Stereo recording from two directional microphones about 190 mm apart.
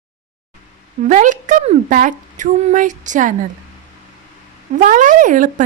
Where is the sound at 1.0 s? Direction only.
40° right (ahead or behind).